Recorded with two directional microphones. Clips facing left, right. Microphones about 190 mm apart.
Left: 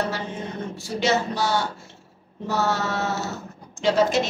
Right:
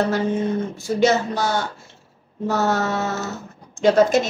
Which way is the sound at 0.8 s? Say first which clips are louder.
Right 5 dB; 50° right (ahead or behind).